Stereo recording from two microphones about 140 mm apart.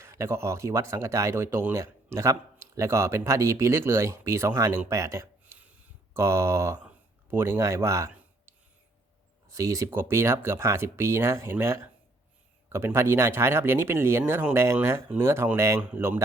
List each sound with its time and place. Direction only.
0.0 s speech: 20° right (ahead or behind)
9.5 s speech: 20° right (ahead or behind)